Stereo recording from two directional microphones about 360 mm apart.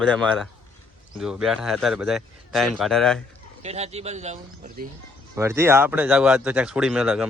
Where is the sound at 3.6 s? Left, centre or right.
Centre.